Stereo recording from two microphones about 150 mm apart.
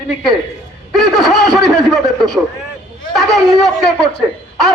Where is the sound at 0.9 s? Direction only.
Centre (ahead or behind).